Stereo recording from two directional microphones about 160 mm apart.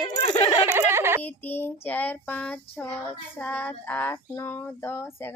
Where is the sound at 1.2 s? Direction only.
10° left (ahead or behind).